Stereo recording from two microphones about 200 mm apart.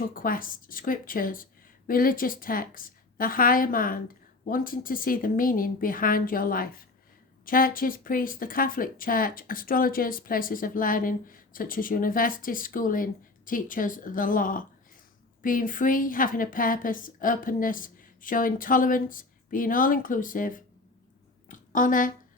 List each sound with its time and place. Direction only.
0.1 s speech: 45° left (ahead or behind)
21.5 s a woman's voice: 40° left (ahead or behind)